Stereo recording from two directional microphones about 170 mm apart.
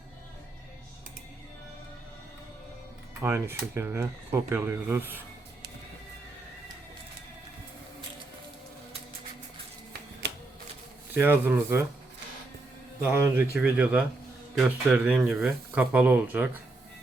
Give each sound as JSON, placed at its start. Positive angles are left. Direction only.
{"t": 3.2, "sound": "speech", "side_deg": -15}
{"t": 10.2, "sound": "typewriter", "side_deg": -80}
{"t": 11.1, "sound": "speech", "side_deg": -10}
{"t": 13.0, "sound": "speech", "side_deg": -15}